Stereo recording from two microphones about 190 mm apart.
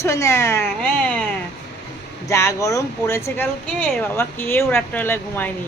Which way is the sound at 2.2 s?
15° left (ahead or behind).